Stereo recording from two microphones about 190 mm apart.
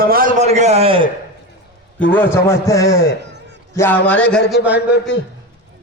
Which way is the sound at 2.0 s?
10° left (ahead or behind).